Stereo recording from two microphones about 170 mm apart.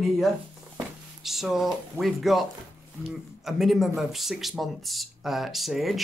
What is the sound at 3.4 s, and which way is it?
Speech, centre (ahead or behind).